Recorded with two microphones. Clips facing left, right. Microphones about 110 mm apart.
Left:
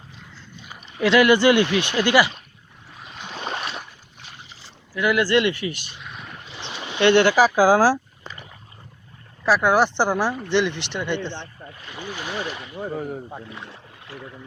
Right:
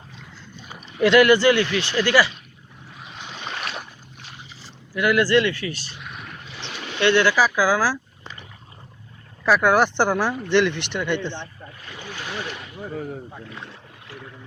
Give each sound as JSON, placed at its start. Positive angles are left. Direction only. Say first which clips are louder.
{"t": 1.0, "sound": "speech", "louder": "right 2 dB", "side_deg": 0}
{"t": 1.3, "sound": "speech", "louder": "left 1 dB", "side_deg": 20}
{"t": 4.9, "sound": "speech", "louder": "right 1 dB", "side_deg": 0}
{"t": 5.2, "sound": "speech", "louder": "right 1 dB", "side_deg": 20}
{"t": 6.6, "sound": "boat", "louder": "left 1 dB", "side_deg": 15}
{"t": 7.0, "sound": "speech", "louder": "left 3 dB", "side_deg": 30}
{"t": 9.5, "sound": "speech", "louder": "even", "side_deg": 5}
{"t": 12.8, "sound": "speech", "louder": "left 3 dB", "side_deg": 30}
{"t": 13.1, "sound": "speech", "louder": "left 2 dB", "side_deg": 15}